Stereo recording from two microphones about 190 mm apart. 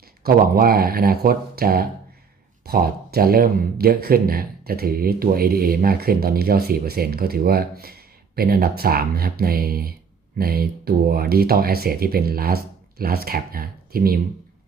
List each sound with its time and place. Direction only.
0.2 s speech: 50° right (ahead or behind)